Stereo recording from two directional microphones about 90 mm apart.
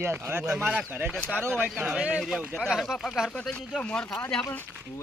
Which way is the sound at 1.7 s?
5° right (ahead or behind).